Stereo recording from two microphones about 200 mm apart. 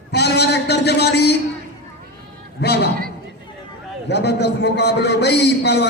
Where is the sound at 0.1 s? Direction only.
55° left (ahead or behind).